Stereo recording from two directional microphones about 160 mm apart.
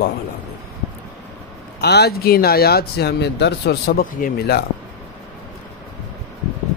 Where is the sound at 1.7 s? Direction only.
90° left; by 4.6 s 70° left (ahead or behind).